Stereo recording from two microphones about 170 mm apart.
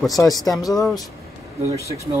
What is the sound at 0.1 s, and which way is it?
Speech, 20° left (ahead or behind).